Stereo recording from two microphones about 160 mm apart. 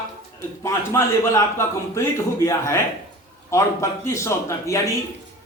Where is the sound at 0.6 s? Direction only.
15° left (ahead or behind).